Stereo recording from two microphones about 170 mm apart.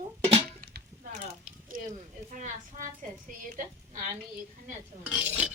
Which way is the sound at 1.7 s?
55° right (ahead or behind).